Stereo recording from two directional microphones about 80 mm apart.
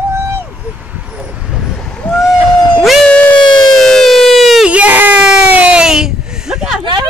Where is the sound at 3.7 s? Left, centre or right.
Centre.